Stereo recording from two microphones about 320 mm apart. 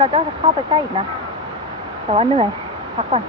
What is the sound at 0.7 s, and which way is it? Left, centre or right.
Speech, centre.